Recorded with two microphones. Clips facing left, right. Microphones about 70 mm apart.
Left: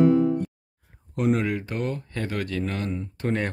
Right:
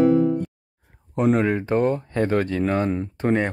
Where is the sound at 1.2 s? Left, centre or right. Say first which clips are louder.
Right 4 dB; right.